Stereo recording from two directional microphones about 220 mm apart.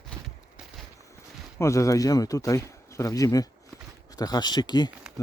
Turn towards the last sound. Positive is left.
turn(degrees=20)  # may be behind; listen again after turning